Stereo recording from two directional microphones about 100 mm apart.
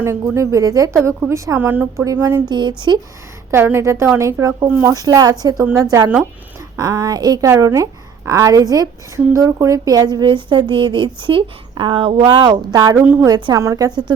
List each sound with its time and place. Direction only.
0.0 s a woman's voice: 30° right (ahead or behind)
1.5 s a woman's voice: 20° right (ahead or behind)
2.5 s speech: 50° right (ahead or behind)
3.5 s a woman's voice: 25° right (ahead or behind); by 14.1 s 40° right (ahead or behind)